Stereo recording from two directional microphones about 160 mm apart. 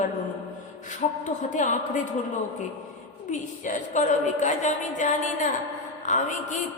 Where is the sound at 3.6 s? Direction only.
50° left (ahead or behind).